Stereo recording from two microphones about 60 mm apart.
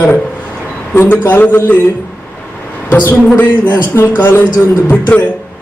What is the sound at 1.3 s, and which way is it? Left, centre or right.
Speech, left.